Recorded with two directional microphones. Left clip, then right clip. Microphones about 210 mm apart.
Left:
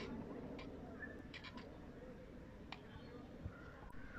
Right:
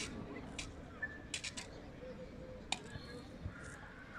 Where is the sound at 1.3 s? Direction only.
55° right (ahead or behind).